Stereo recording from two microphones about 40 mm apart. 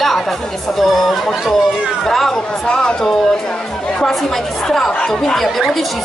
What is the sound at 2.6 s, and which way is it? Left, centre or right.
Speech, centre.